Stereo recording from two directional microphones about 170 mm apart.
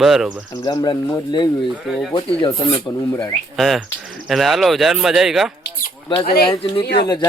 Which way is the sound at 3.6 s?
Centre (ahead or behind).